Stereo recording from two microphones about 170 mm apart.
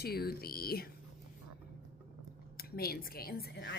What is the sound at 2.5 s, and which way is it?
A woman's voice, 65° left (ahead or behind).